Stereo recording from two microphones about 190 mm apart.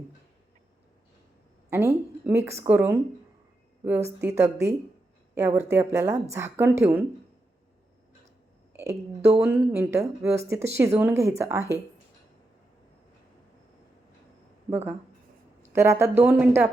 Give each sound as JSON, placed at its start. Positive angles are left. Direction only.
{"t": 1.7, "sound": "speech", "side_deg": -10}
{"t": 8.8, "sound": "speech", "side_deg": -15}
{"t": 15.7, "sound": "speech", "side_deg": -15}